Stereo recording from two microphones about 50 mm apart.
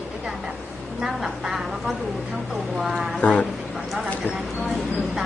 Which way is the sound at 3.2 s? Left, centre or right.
Left.